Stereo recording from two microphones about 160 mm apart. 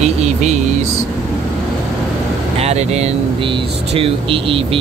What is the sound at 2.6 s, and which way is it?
Speech, 40° right (ahead or behind).